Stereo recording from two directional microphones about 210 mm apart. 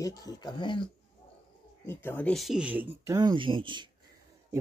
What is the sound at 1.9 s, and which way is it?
Speech, 10° left (ahead or behind).